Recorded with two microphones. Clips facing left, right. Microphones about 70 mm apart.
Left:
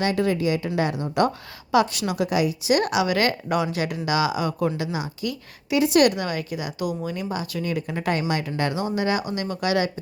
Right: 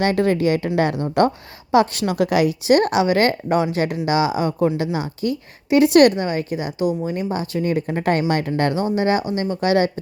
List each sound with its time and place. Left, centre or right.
0.0 s a woman's voice: right
1.7 s a woman's voice: right
2.7 s a woman's voice: right
5.8 s a woman's voice: right
6.1 s a woman's voice: right